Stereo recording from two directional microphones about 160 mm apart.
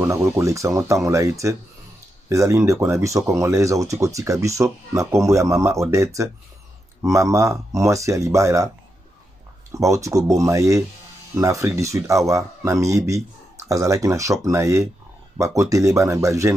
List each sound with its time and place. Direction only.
0.0 s speech: 20° right (ahead or behind)
9.7 s speech: 20° right (ahead or behind)